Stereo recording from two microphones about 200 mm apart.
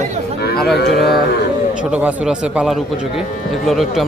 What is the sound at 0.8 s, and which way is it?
Speech, 55° left (ahead or behind).